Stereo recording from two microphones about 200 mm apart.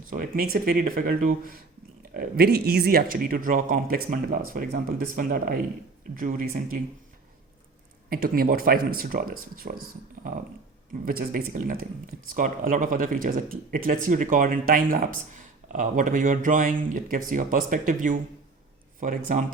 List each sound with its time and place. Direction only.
0.1 s speech: 45° right (ahead or behind)
8.1 s speech: 45° right (ahead or behind)
11.0 s speech: 45° right (ahead or behind)